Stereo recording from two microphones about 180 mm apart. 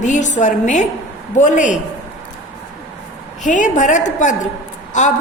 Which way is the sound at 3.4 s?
40° left (ahead or behind).